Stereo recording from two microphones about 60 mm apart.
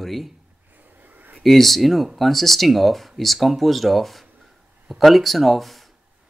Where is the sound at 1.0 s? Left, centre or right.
Right.